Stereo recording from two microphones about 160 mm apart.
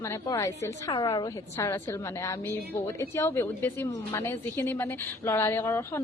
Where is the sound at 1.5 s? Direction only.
15° left (ahead or behind).